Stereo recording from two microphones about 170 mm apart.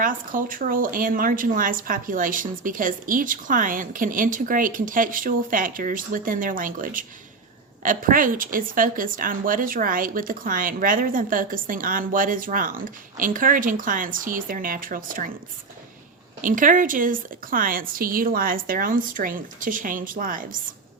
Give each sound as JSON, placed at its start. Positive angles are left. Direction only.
{"t": 0.0, "sound": "a woman's voice", "side_deg": -55}
{"t": 16.4, "sound": "a woman's voice", "side_deg": -50}